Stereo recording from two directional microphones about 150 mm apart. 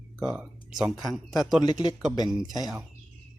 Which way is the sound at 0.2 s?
5° right (ahead or behind).